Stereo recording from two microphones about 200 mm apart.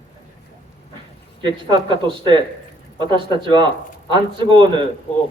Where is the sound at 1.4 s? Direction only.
25° right (ahead or behind).